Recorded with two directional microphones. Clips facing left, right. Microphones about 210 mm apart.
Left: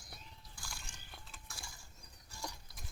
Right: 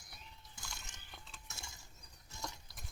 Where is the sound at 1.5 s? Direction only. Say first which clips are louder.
Even; 25° right (ahead or behind).